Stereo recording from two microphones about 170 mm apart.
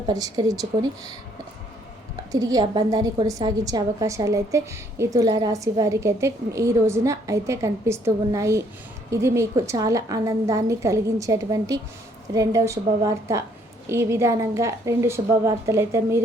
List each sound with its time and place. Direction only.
0.1 s a woman's voice: 20° right (ahead or behind)
2.3 s a woman's voice: 20° right (ahead or behind)